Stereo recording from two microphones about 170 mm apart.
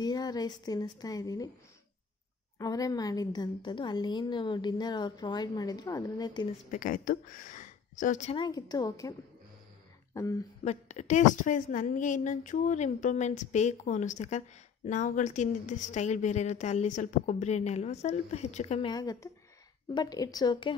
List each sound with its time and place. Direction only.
0.0 s a woman's voice: 25° left (ahead or behind)
2.6 s a woman's voice: 20° left (ahead or behind)
6.7 s speech: 50° left (ahead or behind)
8.4 s a woman's voice: 25° left (ahead or behind)
10.1 s a woman's voice: 20° left (ahead or behind)
10.6 s a woman's voice: 40° left (ahead or behind)
18.9 s a woman's voice: 20° left (ahead or behind)